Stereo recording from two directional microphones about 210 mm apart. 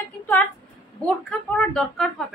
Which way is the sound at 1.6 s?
5° left (ahead or behind).